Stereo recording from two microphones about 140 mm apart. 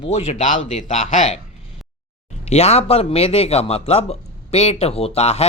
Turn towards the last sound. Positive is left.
turn(degrees=50)  # may be behind; listen again after turning